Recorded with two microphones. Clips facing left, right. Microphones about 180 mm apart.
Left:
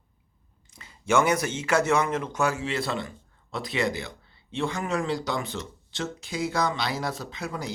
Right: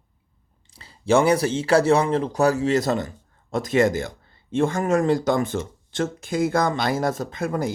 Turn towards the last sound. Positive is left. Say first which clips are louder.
# right 8 dB
turn(degrees=-50)  # may be behind; listen again after turning